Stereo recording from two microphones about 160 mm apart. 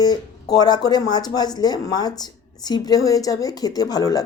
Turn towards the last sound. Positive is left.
turn(degrees=25)  # may be behind; listen again after turning